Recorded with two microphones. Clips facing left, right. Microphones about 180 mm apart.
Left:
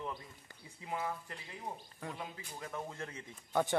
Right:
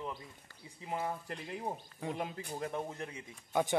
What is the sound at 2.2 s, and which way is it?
Speech, 55° right (ahead or behind).